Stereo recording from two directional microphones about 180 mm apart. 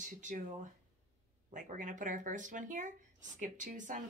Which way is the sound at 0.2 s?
45° right (ahead or behind).